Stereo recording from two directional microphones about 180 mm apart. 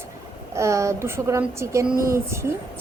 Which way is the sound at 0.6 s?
15° right (ahead or behind).